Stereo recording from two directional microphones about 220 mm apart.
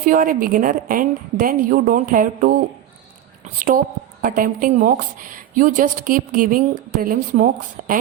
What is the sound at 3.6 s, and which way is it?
A woman's voice, 40° right (ahead or behind).